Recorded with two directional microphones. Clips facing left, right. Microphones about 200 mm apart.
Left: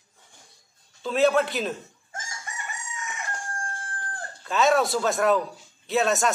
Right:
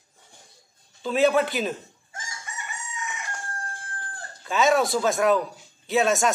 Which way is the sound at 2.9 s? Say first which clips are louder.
Right 2 dB; 45° left (ahead or behind).